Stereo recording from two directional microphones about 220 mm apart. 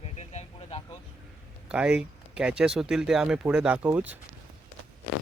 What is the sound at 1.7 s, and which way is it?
Speech, 5° right (ahead or behind).